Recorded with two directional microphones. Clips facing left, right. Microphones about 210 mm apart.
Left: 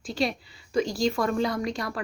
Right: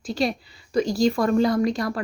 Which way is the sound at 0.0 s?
40° right (ahead or behind).